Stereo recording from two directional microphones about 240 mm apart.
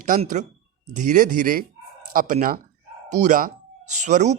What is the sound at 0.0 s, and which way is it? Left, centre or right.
Speech, right.